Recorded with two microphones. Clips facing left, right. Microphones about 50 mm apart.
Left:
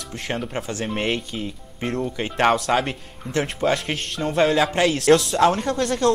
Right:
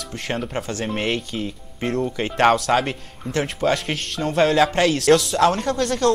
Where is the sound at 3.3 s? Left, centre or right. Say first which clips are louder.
Even; centre.